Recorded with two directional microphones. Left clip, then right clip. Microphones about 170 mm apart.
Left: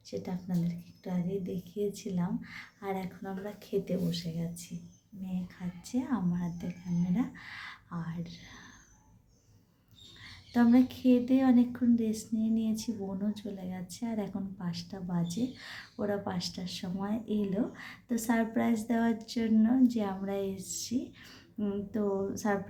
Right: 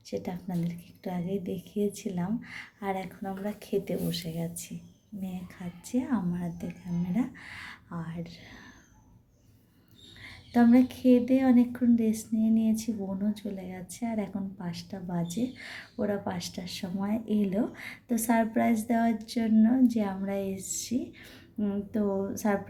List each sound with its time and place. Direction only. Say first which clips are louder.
0.1 s a woman's voice: right 3 dB; 15° right (ahead or behind)
10.5 s a woman's voice: right 3 dB; 10° right (ahead or behind)